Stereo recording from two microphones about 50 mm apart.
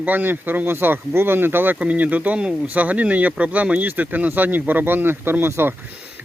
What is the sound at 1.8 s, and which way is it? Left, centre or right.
Speech, right.